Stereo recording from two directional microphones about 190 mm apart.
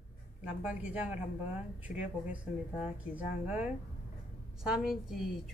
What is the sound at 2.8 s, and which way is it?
A woman's voice, 5° right (ahead or behind).